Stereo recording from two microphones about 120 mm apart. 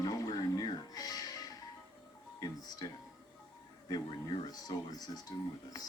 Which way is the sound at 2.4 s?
30° left (ahead or behind).